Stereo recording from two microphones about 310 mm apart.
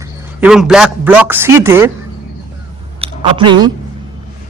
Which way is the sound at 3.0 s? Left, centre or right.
Centre.